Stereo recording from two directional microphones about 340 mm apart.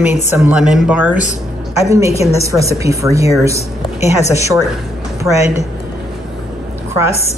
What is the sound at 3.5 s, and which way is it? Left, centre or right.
Speech, centre.